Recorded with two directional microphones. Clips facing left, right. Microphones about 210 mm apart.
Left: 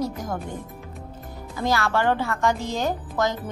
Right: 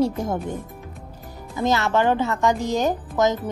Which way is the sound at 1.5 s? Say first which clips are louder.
Right 3 dB; 20° right (ahead or behind).